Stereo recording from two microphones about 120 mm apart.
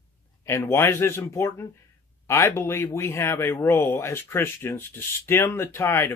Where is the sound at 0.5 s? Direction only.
20° left (ahead or behind).